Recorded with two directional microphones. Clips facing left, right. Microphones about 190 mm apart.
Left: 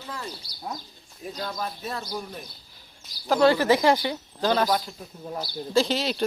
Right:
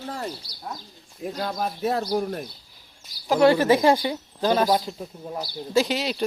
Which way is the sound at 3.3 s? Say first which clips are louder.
Right 2 dB; 20° right (ahead or behind).